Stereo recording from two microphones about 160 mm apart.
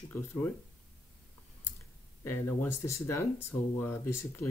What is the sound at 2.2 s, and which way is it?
Speech, 15° left (ahead or behind).